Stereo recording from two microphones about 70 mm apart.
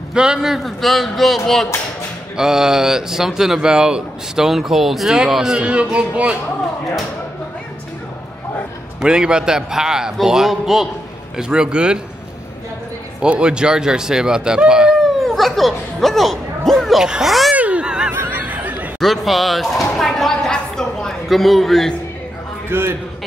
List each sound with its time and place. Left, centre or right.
0.1 s a man's voice: centre
2.3 s speech: centre
9.0 s a man's voice: centre
13.2 s speech: centre
15.1 s a sound: centre
17.0 s a man's voice: centre
17.6 s a sound: centre
18.1 s neigh: right
18.9 s speech: centre
22.7 s a man's voice: right